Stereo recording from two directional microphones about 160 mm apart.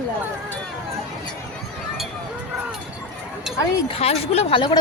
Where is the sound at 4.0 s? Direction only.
40° left (ahead or behind).